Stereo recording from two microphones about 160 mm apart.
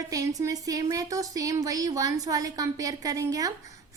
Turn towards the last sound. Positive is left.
turn(degrees=-20)  # may be behind; listen again after turning